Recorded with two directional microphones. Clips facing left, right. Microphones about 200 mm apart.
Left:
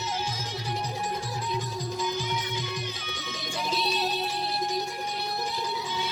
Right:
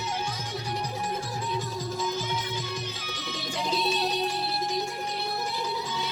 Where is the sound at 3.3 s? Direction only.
Centre (ahead or behind).